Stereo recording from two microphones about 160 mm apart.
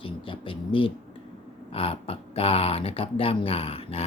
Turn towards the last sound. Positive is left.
turn(degrees=40)  # may be behind; listen again after turning